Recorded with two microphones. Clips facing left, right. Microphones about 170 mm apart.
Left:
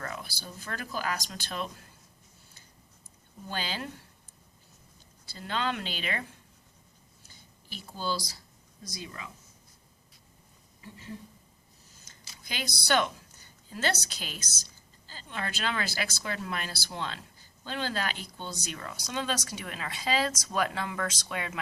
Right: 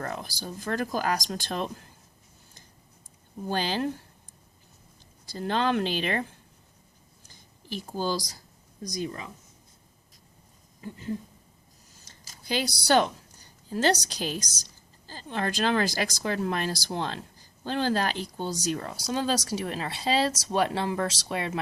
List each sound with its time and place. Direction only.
0.0 s speech: 40° right (ahead or behind)
3.4 s speech: 40° right (ahead or behind)
5.3 s speech: 40° right (ahead or behind)
7.9 s speech: 40° right (ahead or behind)
12.0 s a sound: 40° right (ahead or behind)
14.0 s speech: 40° right (ahead or behind)